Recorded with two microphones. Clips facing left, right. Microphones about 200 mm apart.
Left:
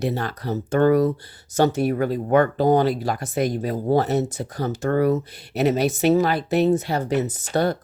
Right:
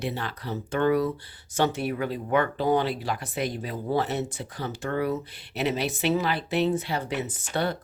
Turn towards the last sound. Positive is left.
turn(degrees=40)  # may be behind; listen again after turning